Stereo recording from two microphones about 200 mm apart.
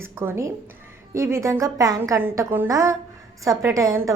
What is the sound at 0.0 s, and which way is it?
A woman's voice, 10° right (ahead or behind).